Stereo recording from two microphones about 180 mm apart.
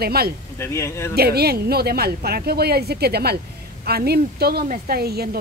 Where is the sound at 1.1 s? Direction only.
60° right (ahead or behind).